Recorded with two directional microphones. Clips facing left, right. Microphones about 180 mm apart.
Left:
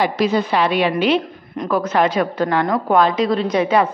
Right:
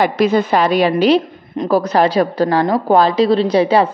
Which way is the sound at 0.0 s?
50° right (ahead or behind).